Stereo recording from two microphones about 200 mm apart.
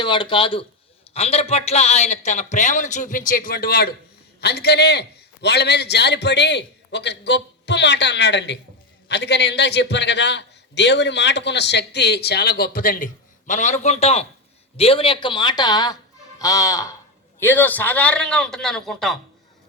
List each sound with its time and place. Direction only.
0.0 s a man's voice: 25° left (ahead or behind); by 19.1 s centre (ahead or behind)